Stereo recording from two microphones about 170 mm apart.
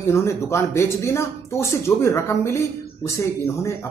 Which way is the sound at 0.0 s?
15° left (ahead or behind).